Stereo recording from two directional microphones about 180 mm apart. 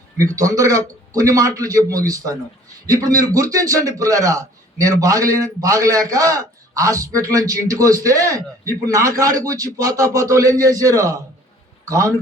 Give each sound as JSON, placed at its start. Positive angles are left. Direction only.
{"t": 0.2, "sound": "a man's voice", "side_deg": -20}